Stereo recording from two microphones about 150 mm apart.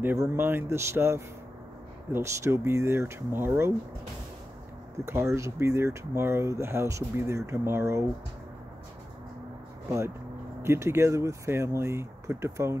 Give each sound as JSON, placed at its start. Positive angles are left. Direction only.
{"t": 0.0, "sound": "speech", "side_deg": -15}
{"t": 5.0, "sound": "speech", "side_deg": -20}
{"t": 9.8, "sound": "speech", "side_deg": -20}